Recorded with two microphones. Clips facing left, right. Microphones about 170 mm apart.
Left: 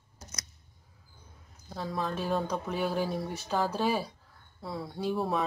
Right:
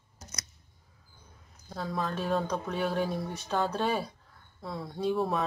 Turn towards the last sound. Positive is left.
turn(degrees=0)  # may be behind; listen again after turning